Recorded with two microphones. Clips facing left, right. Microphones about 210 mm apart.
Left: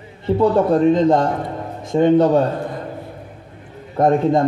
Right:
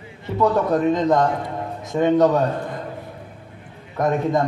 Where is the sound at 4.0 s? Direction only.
30° left (ahead or behind).